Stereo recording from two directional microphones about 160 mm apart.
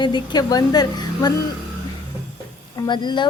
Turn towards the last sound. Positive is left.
turn(degrees=30)  # may be behind; listen again after turning